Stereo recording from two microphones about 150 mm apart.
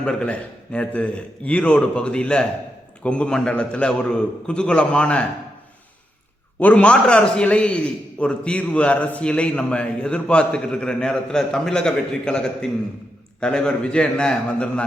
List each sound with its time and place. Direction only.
0.0 s a man's voice: 5° left (ahead or behind)
6.6 s a man's voice: 10° left (ahead or behind)